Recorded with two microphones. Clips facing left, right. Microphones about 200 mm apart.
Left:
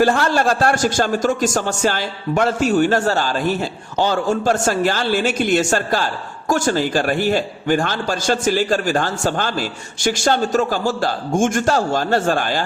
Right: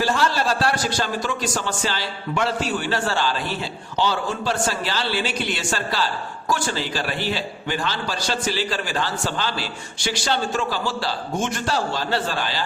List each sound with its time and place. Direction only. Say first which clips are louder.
0.0 s a man's voice: left 6 dB; 50° left (ahead or behind)